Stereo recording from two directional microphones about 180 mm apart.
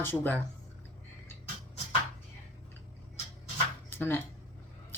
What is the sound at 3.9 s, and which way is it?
Speech, 10° left (ahead or behind).